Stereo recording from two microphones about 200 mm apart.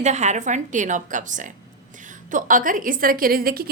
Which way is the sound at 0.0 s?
35° right (ahead or behind).